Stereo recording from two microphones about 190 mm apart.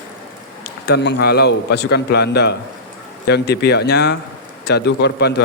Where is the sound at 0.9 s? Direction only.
65° left (ahead or behind).